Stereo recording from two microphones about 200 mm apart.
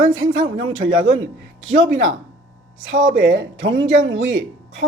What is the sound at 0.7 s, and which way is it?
Speech, 80° right.